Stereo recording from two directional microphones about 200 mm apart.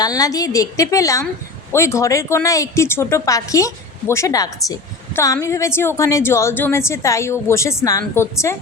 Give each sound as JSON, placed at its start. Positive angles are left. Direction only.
{"t": 0.0, "sound": "a woman's voice", "side_deg": 20}